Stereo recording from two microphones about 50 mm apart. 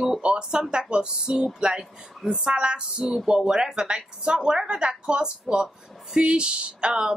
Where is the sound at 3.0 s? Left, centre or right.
Centre.